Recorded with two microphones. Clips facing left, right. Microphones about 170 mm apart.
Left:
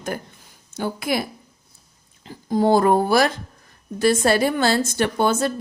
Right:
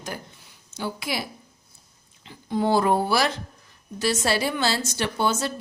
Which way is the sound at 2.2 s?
40° left (ahead or behind).